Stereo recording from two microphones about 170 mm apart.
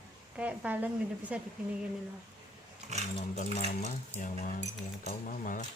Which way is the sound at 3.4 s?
45° left (ahead or behind).